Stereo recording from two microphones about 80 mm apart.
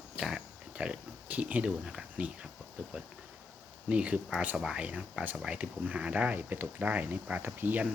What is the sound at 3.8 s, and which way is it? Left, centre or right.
Speech, centre.